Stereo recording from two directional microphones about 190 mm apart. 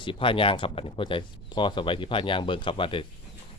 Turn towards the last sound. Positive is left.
turn(degrees=25)  # may be behind; listen again after turning